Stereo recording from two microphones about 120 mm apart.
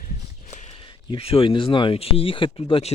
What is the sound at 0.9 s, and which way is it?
Speech, 50° left (ahead or behind).